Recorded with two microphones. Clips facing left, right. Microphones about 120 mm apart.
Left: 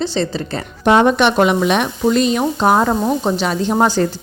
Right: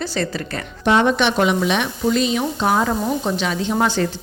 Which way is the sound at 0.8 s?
50° left (ahead or behind).